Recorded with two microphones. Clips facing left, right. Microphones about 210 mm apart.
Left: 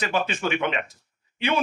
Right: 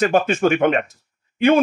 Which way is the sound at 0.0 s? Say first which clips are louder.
Right 9 dB; 50° right (ahead or behind).